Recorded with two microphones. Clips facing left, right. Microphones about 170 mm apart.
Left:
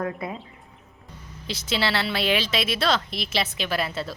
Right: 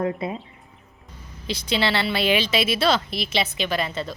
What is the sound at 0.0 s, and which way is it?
Speech, 25° right (ahead or behind).